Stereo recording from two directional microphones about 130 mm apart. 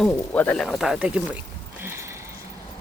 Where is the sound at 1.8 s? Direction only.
20° right (ahead or behind).